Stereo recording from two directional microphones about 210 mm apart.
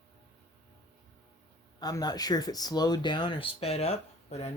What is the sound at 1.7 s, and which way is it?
Speech, 20° left (ahead or behind).